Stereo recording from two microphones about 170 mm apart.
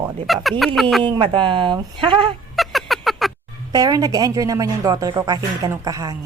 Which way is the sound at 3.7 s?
20° right (ahead or behind).